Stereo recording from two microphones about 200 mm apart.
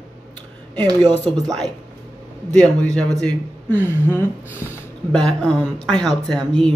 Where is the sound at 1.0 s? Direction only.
5° left (ahead or behind).